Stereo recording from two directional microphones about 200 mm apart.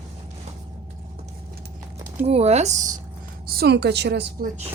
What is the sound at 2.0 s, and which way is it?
Speech, 35° right (ahead or behind).